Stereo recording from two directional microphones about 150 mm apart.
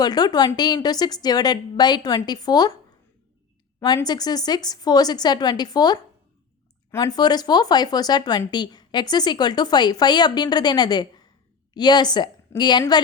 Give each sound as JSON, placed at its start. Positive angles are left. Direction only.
{"t": 0.0, "sound": "speech", "side_deg": 25}
{"t": 3.8, "sound": "a woman's voice", "side_deg": 25}